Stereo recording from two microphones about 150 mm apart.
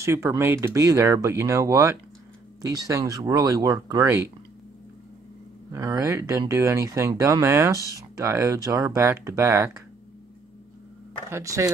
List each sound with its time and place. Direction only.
0.0 s speech: 20° right (ahead or behind)
5.7 s speech: 20° right (ahead or behind)
11.2 s speech: 20° right (ahead or behind)